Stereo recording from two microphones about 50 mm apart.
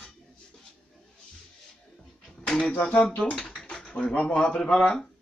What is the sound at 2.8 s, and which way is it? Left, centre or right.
Speech, left.